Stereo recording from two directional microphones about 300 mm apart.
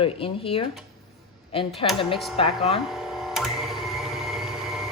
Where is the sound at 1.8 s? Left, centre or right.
Centre.